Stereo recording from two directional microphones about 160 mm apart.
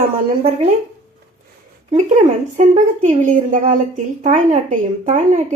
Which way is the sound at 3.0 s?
50° right (ahead or behind).